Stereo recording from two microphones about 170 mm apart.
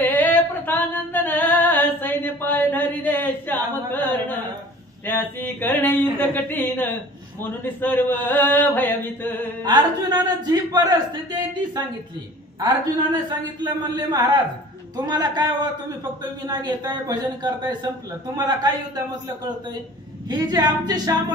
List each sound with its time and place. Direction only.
0.0 s a sound: 10° left (ahead or behind)
9.7 s a man's voice: 25° right (ahead or behind)
12.5 s a man's voice: 20° right (ahead or behind)